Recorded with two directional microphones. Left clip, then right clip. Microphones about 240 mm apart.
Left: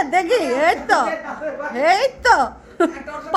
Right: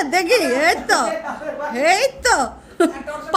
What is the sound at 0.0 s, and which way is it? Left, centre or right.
A woman's voice, right.